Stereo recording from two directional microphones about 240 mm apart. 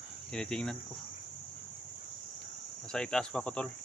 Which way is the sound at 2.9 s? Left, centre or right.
Centre.